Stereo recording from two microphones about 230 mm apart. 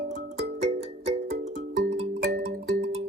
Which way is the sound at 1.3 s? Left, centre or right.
Right.